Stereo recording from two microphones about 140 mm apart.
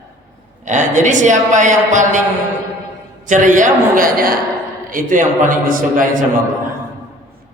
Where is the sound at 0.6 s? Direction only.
60° right (ahead or behind).